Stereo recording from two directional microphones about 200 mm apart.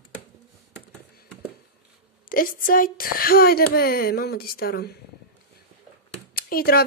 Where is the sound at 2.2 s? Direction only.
45° left (ahead or behind).